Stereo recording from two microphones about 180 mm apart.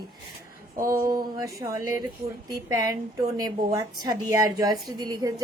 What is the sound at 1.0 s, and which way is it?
A woman's voice, 20° right (ahead or behind).